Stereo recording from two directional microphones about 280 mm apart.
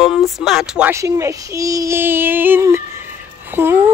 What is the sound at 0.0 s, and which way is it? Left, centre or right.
Speech, centre.